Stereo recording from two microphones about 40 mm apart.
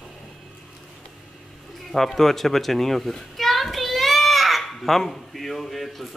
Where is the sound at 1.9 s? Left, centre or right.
Centre.